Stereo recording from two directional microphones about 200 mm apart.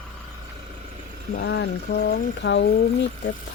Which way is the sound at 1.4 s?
60° left (ahead or behind).